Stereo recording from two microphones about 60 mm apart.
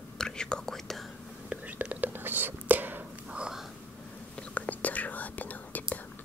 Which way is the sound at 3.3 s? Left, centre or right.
Centre.